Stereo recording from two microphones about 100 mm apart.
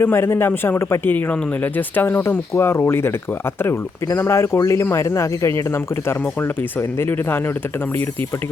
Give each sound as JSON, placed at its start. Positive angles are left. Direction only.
{"t": 0.0, "sound": "speech", "side_deg": 25}